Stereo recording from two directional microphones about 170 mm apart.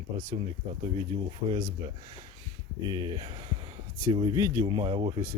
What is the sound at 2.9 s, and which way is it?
Speech, 25° right (ahead or behind).